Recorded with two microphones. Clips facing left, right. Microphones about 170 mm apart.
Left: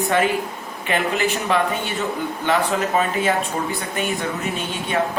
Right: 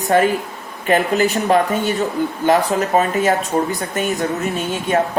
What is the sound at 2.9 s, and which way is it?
A man's voice, 40° right (ahead or behind).